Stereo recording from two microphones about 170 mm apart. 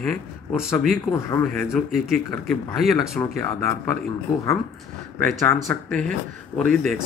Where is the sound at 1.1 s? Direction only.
15° left (ahead or behind).